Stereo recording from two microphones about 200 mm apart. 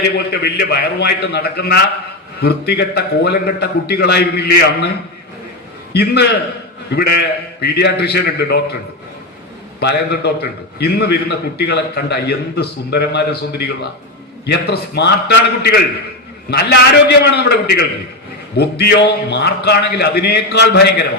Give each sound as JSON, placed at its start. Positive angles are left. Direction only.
{"t": 0.0, "sound": "a man's voice", "side_deg": 55}
{"t": 5.9, "sound": "a man's voice", "side_deg": 55}
{"t": 9.8, "sound": "a man's voice", "side_deg": 55}